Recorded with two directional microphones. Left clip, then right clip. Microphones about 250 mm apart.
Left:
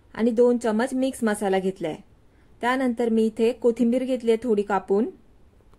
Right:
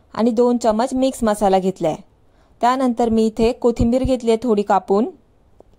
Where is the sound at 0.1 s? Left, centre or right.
Right.